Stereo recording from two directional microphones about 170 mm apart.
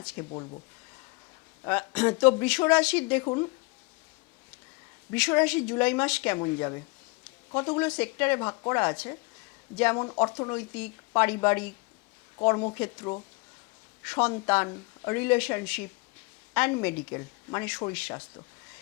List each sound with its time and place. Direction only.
0.2 s a woman's voice: 15° left (ahead or behind)
1.6 s a woman's voice: 15° left (ahead or behind)
3.2 s speech: 25° left (ahead or behind)
5.1 s a woman's voice: 10° left (ahead or behind)
6.4 s speech: 20° left (ahead or behind)
7.9 s a woman's voice: 10° left (ahead or behind)
10.0 s speech: 25° left (ahead or behind)
10.5 s a woman's voice: 15° left (ahead or behind)
13.0 s speech: 25° left (ahead or behind)
14.0 s a woman's voice: 10° left (ahead or behind)